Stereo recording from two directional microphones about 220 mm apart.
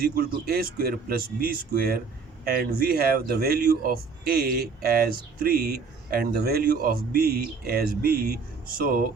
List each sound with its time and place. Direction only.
0.0 s speech: 45° right (ahead or behind)